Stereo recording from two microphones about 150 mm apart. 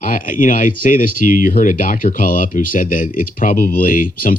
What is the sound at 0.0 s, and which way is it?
Speech, 65° left (ahead or behind).